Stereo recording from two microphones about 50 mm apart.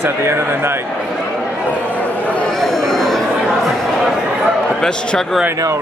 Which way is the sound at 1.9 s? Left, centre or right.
Left.